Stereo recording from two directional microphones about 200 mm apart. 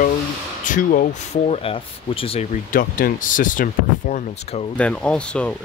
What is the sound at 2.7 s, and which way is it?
Speech, 45° left (ahead or behind).